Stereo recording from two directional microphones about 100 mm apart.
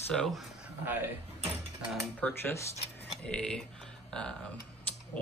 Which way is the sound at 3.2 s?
10° left (ahead or behind).